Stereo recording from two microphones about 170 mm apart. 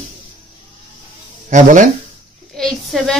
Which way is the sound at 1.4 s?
50° right (ahead or behind).